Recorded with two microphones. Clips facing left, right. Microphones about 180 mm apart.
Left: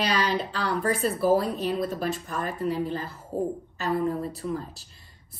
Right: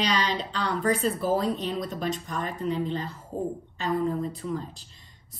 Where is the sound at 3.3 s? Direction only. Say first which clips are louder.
Left 3 dB; 5° left (ahead or behind).